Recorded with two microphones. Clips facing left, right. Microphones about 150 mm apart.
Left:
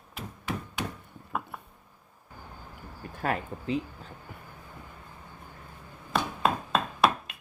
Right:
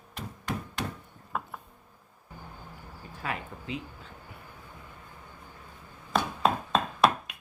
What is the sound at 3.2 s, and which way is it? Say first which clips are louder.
Speech: left 6 dB; 40° left (ahead or behind).